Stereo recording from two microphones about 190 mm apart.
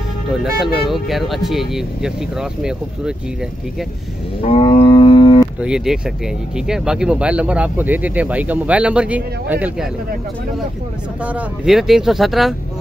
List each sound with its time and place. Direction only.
0.3 s speech: centre (ahead or behind)
4.4 s wild animals: 30° left (ahead or behind)
5.6 s speech: 5° right (ahead or behind)
11.2 s speech: 5° right (ahead or behind)